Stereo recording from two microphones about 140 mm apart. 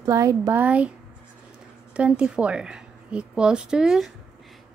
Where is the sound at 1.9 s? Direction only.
10° right (ahead or behind).